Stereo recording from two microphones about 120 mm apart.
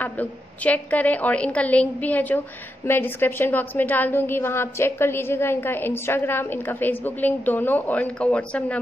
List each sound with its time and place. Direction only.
0.0 s a woman's voice: 15° left (ahead or behind)